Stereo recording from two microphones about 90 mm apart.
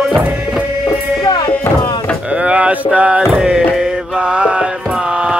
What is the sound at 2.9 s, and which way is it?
Mantra, 15° right (ahead or behind).